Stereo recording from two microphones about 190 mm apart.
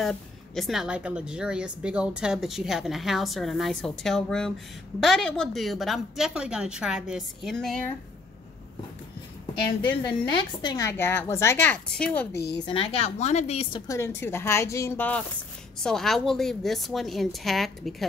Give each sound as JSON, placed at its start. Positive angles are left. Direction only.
{"t": 0.0, "sound": "a woman's voice", "side_deg": 0}
{"t": 10.3, "sound": "a woman's voice", "side_deg": 20}
{"t": 12.6, "sound": "a woman's voice", "side_deg": 30}
{"t": 13.8, "sound": "a woman's voice", "side_deg": 15}